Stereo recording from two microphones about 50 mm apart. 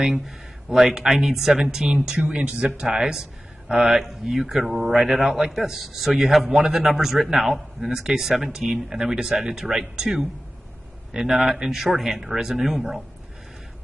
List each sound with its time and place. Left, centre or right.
0.7 s speech: centre
2.1 s a man's voice: right